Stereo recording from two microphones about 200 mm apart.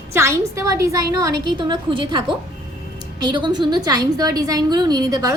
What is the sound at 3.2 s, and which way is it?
A woman's voice, 20° right (ahead or behind).